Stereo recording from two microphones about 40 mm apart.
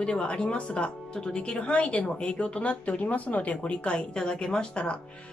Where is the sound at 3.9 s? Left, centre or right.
Centre.